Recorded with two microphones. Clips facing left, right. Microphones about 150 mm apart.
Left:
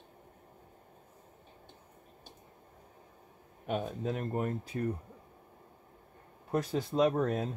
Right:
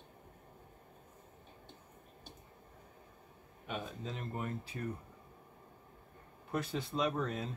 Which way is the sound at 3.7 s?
50° left (ahead or behind).